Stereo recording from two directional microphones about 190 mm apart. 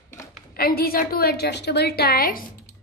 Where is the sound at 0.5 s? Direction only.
50° left (ahead or behind).